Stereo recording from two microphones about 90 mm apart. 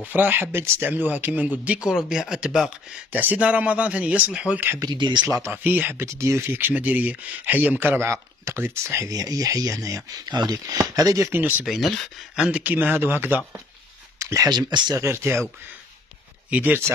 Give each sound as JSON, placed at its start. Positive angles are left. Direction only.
{"t": 0.0, "sound": "speech", "side_deg": -20}
{"t": 3.1, "sound": "speech", "side_deg": -20}
{"t": 4.7, "sound": "speech", "side_deg": -55}
{"t": 5.3, "sound": "speech", "side_deg": -25}
{"t": 11.6, "sound": "speech", "side_deg": 0}
{"t": 12.4, "sound": "speech", "side_deg": -15}
{"t": 14.1, "sound": "speech", "side_deg": -40}
{"t": 16.4, "sound": "speech", "side_deg": -15}